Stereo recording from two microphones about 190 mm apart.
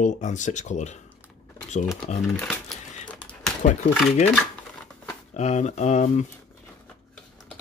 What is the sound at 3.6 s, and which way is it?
Speech, 45° left (ahead or behind).